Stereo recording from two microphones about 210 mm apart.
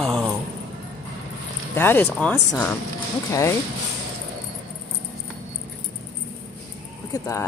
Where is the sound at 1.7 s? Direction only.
10° left (ahead or behind).